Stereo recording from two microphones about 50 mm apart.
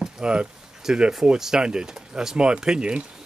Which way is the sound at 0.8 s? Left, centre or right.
Centre.